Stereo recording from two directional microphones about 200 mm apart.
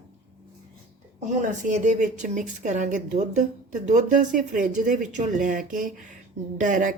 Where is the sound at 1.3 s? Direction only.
40° right (ahead or behind).